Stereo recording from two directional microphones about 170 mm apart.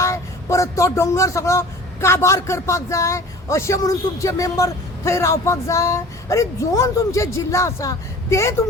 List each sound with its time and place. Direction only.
0.0 s speech: 15° left (ahead or behind)